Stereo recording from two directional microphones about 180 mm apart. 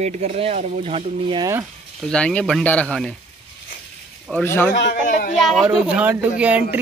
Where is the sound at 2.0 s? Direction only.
5° left (ahead or behind).